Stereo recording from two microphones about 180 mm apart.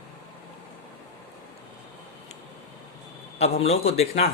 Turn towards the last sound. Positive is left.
turn(degrees=35)  # may be behind; listen again after turning